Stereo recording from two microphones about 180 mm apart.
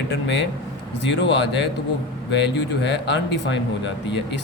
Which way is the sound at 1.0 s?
75° left (ahead or behind).